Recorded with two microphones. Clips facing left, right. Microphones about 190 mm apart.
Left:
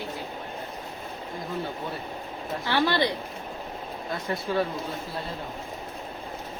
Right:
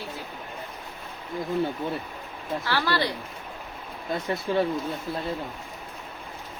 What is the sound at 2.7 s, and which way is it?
Speech, 20° left (ahead or behind).